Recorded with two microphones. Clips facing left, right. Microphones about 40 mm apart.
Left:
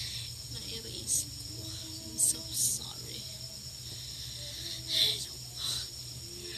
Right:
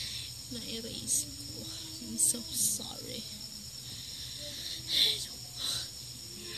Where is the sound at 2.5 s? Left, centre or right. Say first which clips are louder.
Even; right.